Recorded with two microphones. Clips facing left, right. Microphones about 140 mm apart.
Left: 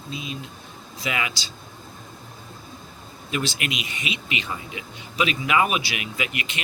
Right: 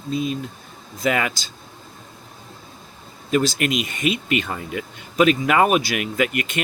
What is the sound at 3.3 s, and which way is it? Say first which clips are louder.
Speech: right 8 dB; 40° right (ahead or behind).